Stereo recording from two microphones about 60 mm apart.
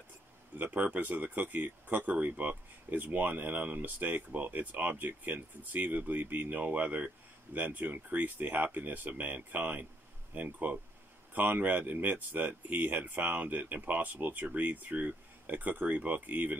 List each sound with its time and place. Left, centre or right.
0.7 s speech: right